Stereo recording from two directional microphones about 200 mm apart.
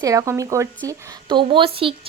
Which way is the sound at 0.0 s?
15° right (ahead or behind).